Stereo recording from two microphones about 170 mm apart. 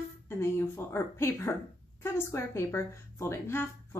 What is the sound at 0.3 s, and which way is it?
A woman's voice, 15° left (ahead or behind).